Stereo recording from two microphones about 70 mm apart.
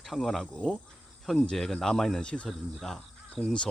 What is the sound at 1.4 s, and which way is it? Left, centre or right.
Speech, centre.